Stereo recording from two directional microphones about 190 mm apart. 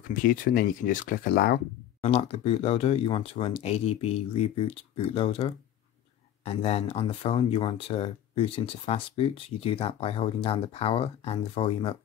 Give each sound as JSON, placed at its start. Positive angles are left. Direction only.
{"t": 0.1, "sound": "speech", "side_deg": 45}
{"t": 2.0, "sound": "speech", "side_deg": 30}